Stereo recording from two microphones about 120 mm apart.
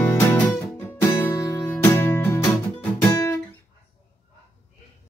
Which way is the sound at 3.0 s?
25° left (ahead or behind).